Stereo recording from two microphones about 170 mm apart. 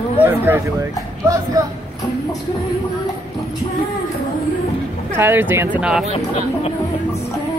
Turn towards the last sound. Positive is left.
turn(degrees=-5)  # may be behind; listen again after turning